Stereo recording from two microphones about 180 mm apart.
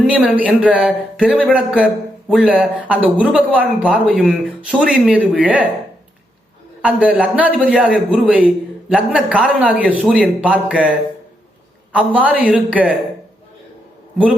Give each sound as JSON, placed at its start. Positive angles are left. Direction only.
{"t": 0.0, "sound": "a man's voice", "side_deg": -5}
{"t": 6.8, "sound": "a man's voice", "side_deg": -5}